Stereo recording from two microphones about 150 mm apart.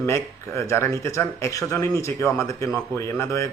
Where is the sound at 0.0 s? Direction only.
20° left (ahead or behind).